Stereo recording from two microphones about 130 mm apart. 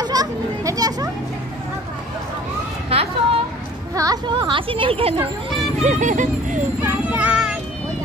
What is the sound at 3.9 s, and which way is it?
A woman's voice, 30° right (ahead or behind).